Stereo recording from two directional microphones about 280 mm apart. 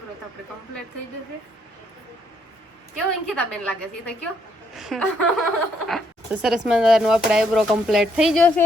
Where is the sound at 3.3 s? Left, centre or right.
Centre.